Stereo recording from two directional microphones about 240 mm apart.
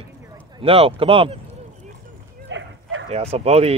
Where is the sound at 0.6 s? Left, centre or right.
Right.